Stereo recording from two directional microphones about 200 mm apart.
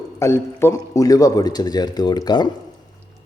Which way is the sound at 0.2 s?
15° left (ahead or behind).